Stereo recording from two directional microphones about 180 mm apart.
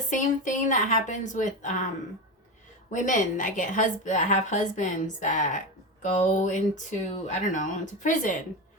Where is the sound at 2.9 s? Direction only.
45° left (ahead or behind).